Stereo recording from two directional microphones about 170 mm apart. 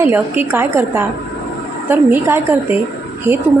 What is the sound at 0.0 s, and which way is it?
Speech, 10° right (ahead or behind).